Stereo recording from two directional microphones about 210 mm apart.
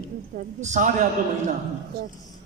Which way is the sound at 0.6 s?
35° right (ahead or behind).